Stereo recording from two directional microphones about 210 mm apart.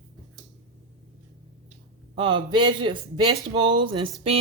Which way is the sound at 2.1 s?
25° right (ahead or behind).